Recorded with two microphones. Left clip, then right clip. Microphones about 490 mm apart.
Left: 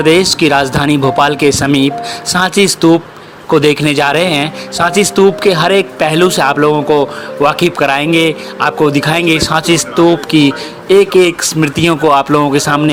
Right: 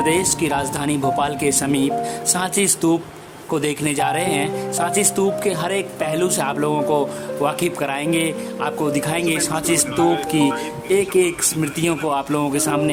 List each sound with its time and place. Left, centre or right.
0.0 s speech: right